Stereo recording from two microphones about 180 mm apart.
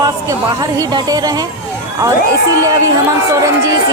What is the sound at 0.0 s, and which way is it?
A woman's voice, 20° right (ahead or behind).